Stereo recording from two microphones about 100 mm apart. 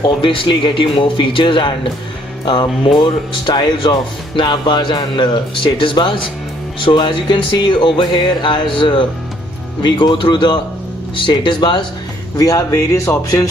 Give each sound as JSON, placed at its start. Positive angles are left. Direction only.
{"t": 0.0, "sound": "speech", "side_deg": 55}
{"t": 12.4, "sound": "speech", "side_deg": 35}